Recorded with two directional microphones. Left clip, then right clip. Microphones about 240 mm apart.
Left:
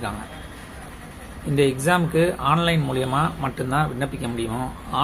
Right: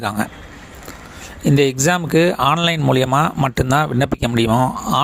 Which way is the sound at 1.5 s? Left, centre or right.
Right.